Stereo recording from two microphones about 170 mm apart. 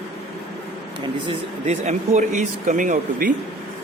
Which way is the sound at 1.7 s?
40° right (ahead or behind).